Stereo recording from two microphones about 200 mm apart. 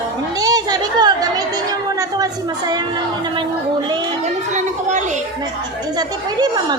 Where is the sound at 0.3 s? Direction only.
20° right (ahead or behind).